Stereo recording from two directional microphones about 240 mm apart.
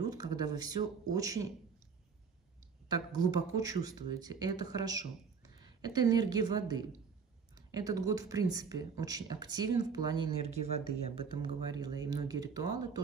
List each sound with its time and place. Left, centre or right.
0.0 s a sound: centre
1.1 s speech: centre
2.9 s speech: centre